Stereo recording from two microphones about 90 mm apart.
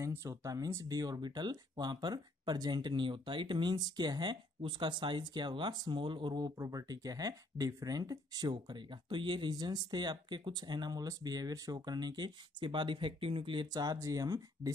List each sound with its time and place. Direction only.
0.0 s speech: 30° right (ahead or behind); by 4.4 s 55° right (ahead or behind)
4.6 s speech: 65° right (ahead or behind)
6.3 s speech: 45° right (ahead or behind); by 13.7 s 70° right (ahead or behind)
13.7 s speech: 45° right (ahead or behind)